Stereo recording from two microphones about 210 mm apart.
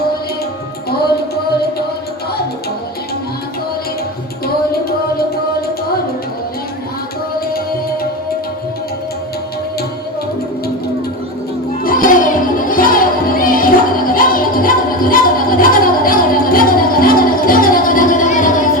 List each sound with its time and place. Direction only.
4.4 s music: 45° left (ahead or behind)
11.8 s music: 40° left (ahead or behind)